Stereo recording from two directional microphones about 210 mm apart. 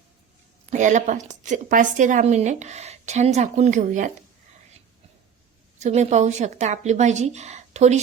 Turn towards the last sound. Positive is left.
turn(degrees=-30)  # may be behind; listen again after turning